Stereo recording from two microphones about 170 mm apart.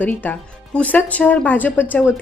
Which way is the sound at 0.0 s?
10° left (ahead or behind).